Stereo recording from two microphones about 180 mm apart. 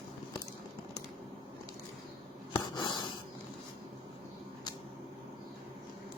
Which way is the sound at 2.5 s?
25° left (ahead or behind).